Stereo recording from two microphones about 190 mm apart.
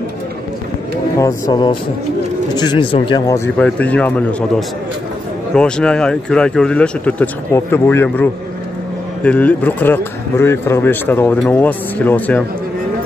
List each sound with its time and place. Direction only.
1.1 s speech: 15° left (ahead or behind)
3.5 s speech: 5° left (ahead or behind)